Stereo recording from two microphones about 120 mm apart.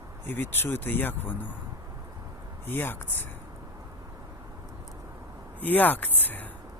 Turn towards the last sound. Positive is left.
turn(degrees=15)  # may be behind; listen again after turning